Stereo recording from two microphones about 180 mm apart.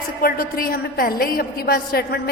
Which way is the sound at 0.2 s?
55° left (ahead or behind).